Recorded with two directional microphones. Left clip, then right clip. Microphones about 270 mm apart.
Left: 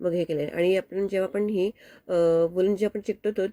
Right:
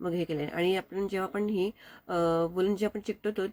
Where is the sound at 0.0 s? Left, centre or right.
Centre.